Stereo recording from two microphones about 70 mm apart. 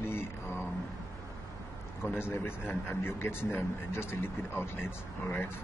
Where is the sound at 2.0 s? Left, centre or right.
Left.